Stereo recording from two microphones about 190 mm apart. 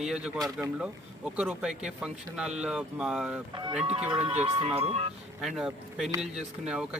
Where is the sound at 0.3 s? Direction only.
20° right (ahead or behind).